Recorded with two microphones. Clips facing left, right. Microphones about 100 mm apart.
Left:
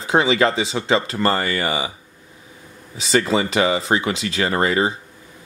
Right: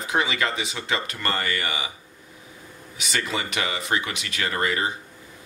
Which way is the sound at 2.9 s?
30° left (ahead or behind).